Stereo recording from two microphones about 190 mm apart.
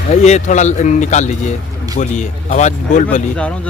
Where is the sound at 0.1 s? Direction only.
35° left (ahead or behind).